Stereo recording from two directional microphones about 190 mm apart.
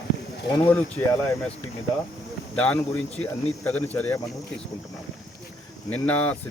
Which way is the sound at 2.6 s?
5° left (ahead or behind).